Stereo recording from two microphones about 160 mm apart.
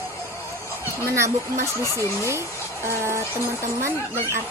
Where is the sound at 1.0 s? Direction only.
20° right (ahead or behind).